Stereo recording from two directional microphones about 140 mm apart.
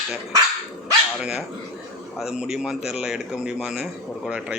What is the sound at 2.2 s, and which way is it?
A man's voice, 5° right (ahead or behind).